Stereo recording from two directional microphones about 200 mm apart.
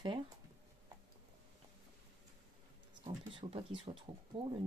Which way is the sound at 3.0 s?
25° right (ahead or behind).